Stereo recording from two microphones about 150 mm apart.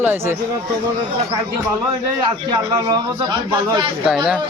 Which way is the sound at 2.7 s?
30° right (ahead or behind).